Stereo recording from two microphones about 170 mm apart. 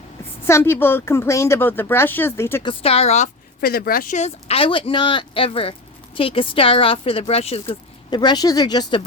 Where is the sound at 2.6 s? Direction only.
35° left (ahead or behind).